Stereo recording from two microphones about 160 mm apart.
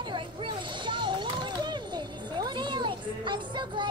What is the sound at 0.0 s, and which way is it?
Music, 30° right (ahead or behind).